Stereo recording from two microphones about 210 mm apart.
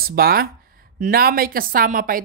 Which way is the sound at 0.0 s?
45° right (ahead or behind).